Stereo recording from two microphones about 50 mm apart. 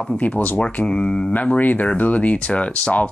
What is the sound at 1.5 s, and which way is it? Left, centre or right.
Speech, left.